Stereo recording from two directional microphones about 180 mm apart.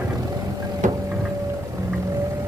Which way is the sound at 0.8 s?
45° right (ahead or behind).